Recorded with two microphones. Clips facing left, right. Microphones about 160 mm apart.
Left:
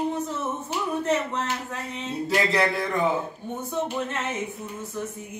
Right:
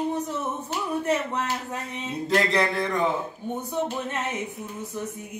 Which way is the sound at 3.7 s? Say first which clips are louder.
Left 1 dB; 10° right (ahead or behind).